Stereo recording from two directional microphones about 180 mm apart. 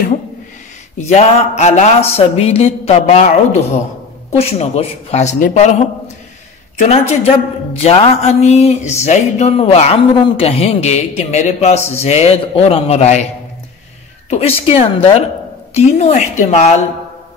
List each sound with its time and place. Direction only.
0.9 s speech: 40° left (ahead or behind)
4.4 s speech: 35° left (ahead or behind)
6.8 s speech: 35° left (ahead or behind)
14.3 s speech: 35° left (ahead or behind)